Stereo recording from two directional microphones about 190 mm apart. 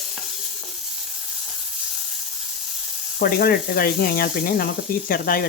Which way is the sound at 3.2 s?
50° left (ahead or behind).